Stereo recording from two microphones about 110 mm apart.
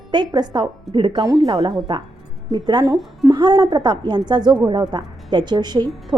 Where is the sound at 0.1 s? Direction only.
40° right (ahead or behind).